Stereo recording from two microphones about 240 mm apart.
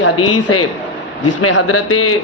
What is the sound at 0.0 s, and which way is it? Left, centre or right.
A man's voice, left.